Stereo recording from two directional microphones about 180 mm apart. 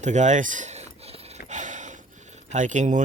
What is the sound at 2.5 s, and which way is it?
Speech, 45° right (ahead or behind).